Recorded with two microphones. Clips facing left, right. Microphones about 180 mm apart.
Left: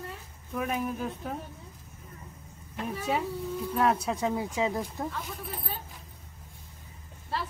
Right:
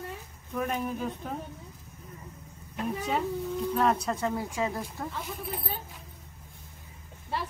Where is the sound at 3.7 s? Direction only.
5° left (ahead or behind).